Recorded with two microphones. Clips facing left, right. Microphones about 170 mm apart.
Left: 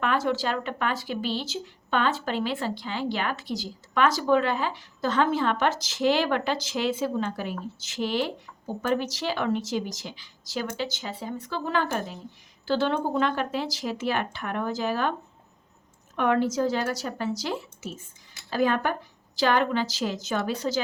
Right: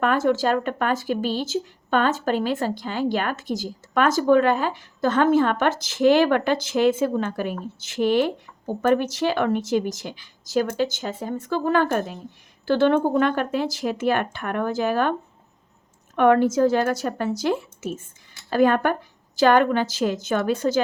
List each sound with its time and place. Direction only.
0.0 s speech: 45° right (ahead or behind)
16.1 s speech: 55° right (ahead or behind)